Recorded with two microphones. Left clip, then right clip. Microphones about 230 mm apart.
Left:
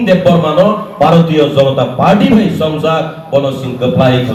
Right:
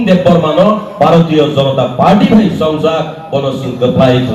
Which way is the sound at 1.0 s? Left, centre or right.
Left.